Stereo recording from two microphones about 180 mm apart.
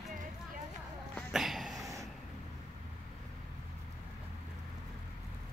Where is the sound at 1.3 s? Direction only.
Centre (ahead or behind).